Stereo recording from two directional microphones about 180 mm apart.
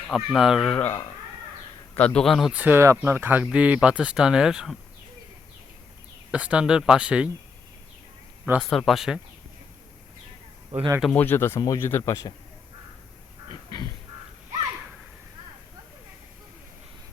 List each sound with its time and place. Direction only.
0.1 s speech: centre (ahead or behind)
6.3 s speech: 5° right (ahead or behind)
8.7 s speech: centre (ahead or behind)
10.7 s speech: 40° right (ahead or behind)
11.1 s speech: 10° left (ahead or behind)
13.5 s duck: 25° left (ahead or behind)